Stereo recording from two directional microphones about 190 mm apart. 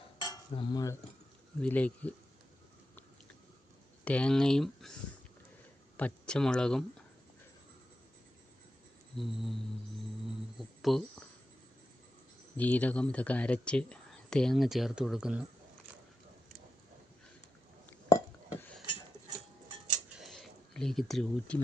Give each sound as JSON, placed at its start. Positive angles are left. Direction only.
{"t": 0.2, "sound": "cutlery", "side_deg": 25}
{"t": 1.6, "sound": "speech", "side_deg": 5}
{"t": 4.0, "sound": "speech", "side_deg": 5}
{"t": 6.0, "sound": "speech", "side_deg": 5}
{"t": 9.1, "sound": "speech", "side_deg": 0}
{"t": 10.2, "sound": "a sound", "side_deg": 0}
{"t": 12.5, "sound": "speech", "side_deg": 10}
{"t": 18.1, "sound": "a sound", "side_deg": 15}
{"t": 20.1, "sound": "a sound", "side_deg": 0}